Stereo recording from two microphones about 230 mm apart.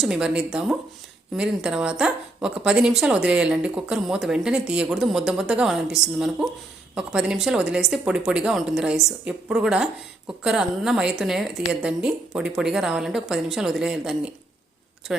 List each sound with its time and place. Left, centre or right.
0.0 s speech: centre